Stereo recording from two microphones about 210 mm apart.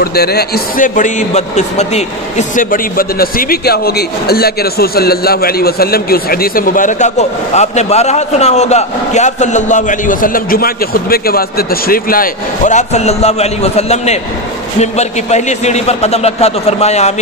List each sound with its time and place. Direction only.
0.0 s a man's voice: 50° left (ahead or behind); by 17.1 s 30° left (ahead or behind)